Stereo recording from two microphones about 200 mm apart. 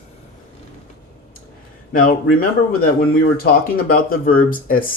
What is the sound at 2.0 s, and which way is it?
Speech, 45° left (ahead or behind).